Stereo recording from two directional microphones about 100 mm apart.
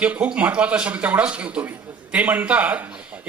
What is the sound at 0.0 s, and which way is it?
A man's voice, 15° right (ahead or behind).